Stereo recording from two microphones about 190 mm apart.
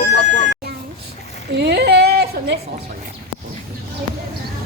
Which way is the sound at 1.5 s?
65° right (ahead or behind).